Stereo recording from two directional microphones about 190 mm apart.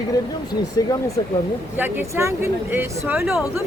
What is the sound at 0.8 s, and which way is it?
Speech, 20° left (ahead or behind).